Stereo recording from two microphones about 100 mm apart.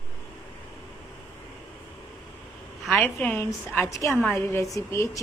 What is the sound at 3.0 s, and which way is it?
Speech, 15° left (ahead or behind).